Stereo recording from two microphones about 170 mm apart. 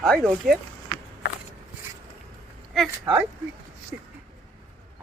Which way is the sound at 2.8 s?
Centre (ahead or behind).